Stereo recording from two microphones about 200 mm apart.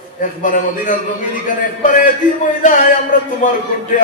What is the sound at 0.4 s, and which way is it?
Mantra, 40° left (ahead or behind).